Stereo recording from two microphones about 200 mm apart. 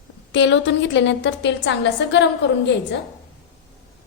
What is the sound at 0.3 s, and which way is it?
A woman's voice, 65° left (ahead or behind).